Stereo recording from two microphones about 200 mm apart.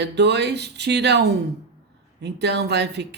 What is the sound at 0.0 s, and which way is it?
Speech, 60° right (ahead or behind).